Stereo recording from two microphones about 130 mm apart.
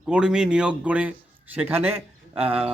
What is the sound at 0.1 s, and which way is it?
Speech, 5° right (ahead or behind).